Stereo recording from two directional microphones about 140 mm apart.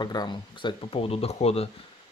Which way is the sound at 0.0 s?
30° left (ahead or behind).